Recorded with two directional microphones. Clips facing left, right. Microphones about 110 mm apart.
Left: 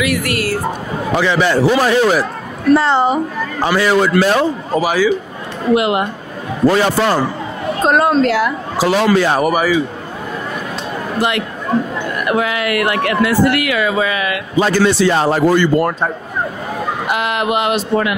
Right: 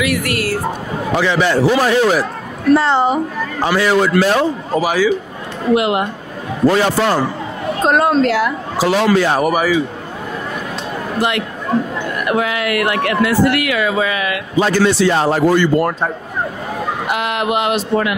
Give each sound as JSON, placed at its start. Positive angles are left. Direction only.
{"t": 0.0, "sound": "speech", "side_deg": 20}
{"t": 11.1, "sound": "speech", "side_deg": 20}
{"t": 17.1, "sound": "speech", "side_deg": 20}